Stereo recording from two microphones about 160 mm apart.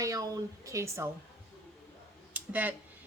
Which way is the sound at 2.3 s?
10° right (ahead or behind).